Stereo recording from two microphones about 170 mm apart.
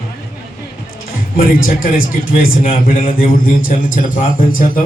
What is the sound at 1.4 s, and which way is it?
A man's voice, 60° left (ahead or behind).